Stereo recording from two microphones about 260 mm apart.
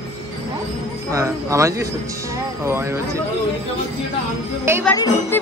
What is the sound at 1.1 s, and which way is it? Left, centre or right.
Speech, centre.